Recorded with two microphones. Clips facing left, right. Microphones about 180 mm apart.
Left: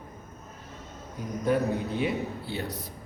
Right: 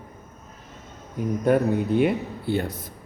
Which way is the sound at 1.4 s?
55° right (ahead or behind).